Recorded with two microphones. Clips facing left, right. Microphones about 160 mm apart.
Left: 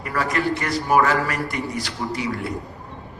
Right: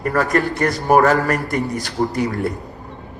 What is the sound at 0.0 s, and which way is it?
A man's voice, 45° right (ahead or behind).